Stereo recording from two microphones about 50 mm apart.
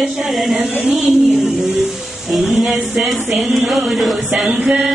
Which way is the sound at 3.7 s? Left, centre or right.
Centre.